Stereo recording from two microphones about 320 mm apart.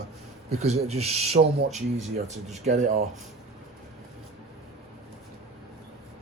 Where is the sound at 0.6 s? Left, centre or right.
Centre.